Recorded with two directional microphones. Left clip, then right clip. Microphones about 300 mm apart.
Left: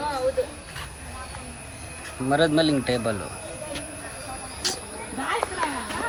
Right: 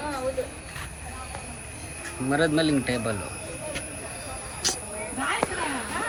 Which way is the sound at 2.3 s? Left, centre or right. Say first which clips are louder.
Left 3 dB; centre.